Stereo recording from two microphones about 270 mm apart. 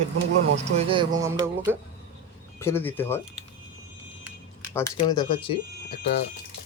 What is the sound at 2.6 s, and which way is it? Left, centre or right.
Speech, centre.